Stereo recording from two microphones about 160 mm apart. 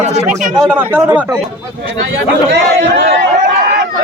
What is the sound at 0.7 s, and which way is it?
Speech, 10° right (ahead or behind).